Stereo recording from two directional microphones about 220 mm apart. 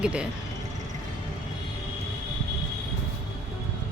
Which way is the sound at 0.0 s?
5° right (ahead or behind).